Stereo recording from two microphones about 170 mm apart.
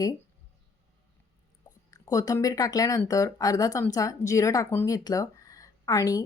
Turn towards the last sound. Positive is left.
turn(degrees=20)  # may be behind; listen again after turning